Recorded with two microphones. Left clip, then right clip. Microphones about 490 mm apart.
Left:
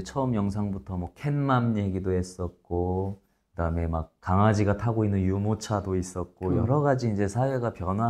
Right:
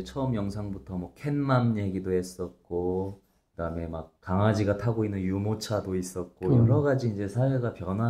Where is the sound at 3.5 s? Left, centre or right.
Left.